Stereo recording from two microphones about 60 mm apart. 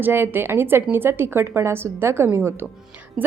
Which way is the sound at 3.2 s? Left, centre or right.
Centre.